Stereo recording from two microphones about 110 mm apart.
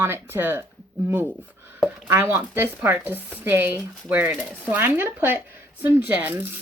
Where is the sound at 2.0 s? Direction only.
25° right (ahead or behind).